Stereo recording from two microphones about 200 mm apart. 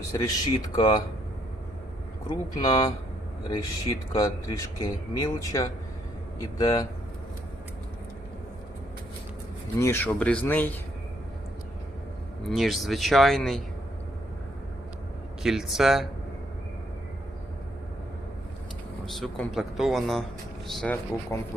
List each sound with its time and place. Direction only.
0.1 s speech: 20° left (ahead or behind)
2.6 s speech: 20° left (ahead or behind)
9.7 s speech: 15° left (ahead or behind)
12.5 s speech: centre (ahead or behind)
15.4 s speech: centre (ahead or behind)
19.0 s speech: centre (ahead or behind)
21.3 s speech: 15° left (ahead or behind)